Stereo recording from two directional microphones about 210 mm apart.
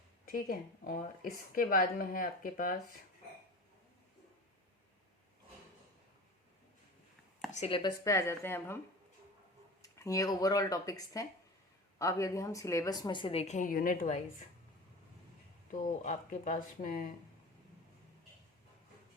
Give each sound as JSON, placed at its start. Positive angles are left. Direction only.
{"t": 0.3, "sound": "a woman's voice", "side_deg": 40}
{"t": 7.5, "sound": "speech", "side_deg": 30}
{"t": 9.8, "sound": "a woman's voice", "side_deg": 15}
{"t": 15.7, "sound": "a woman's voice", "side_deg": 40}